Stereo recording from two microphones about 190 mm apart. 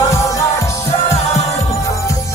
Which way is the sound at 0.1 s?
15° left (ahead or behind).